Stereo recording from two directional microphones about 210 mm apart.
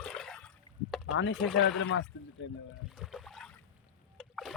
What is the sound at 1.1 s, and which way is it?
Speech, 60° left (ahead or behind).